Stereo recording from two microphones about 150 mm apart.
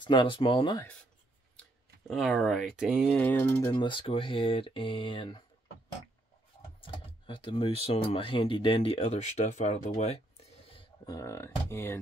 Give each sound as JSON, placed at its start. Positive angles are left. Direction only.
{"t": 0.0, "sound": "speech", "side_deg": 30}
{"t": 2.0, "sound": "speech", "side_deg": 0}
{"t": 3.2, "sound": "speech", "side_deg": 15}
{"t": 3.7, "sound": "speech", "side_deg": 30}
{"t": 6.8, "sound": "speech", "side_deg": 35}
{"t": 11.1, "sound": "speech", "side_deg": 20}